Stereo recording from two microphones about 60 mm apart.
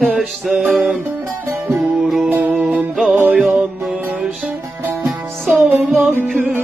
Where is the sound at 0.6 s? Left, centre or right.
Centre.